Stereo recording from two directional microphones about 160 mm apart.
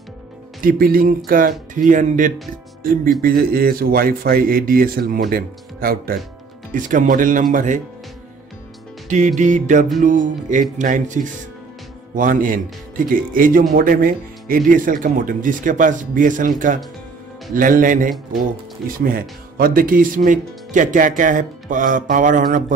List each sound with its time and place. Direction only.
0.6 s speech: 60° right (ahead or behind)
3.2 s speech: 65° right (ahead or behind)
6.7 s speech: 55° right (ahead or behind)
9.4 s speech: 50° right (ahead or behind)